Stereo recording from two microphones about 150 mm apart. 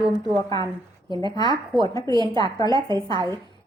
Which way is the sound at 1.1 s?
30° right (ahead or behind).